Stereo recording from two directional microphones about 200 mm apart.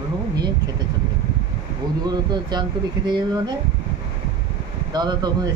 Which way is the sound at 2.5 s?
20° right (ahead or behind).